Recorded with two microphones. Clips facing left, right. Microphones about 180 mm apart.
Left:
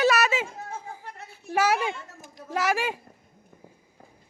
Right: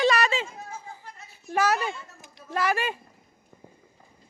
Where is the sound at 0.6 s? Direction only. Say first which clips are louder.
Left 3 dB; 60° left (ahead or behind).